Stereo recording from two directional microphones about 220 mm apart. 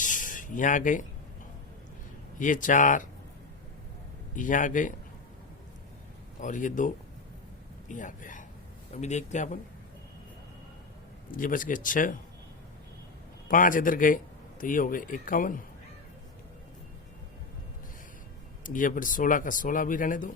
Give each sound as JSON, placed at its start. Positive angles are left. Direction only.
{"t": 0.0, "sound": "a sound", "side_deg": 35}
{"t": 2.4, "sound": "speech", "side_deg": 35}
{"t": 4.4, "sound": "speech", "side_deg": 35}
{"t": 6.4, "sound": "a man's voice", "side_deg": 35}
{"t": 11.3, "sound": "speech", "side_deg": 40}
{"t": 13.5, "sound": "speech", "side_deg": 35}
{"t": 18.6, "sound": "speech", "side_deg": 35}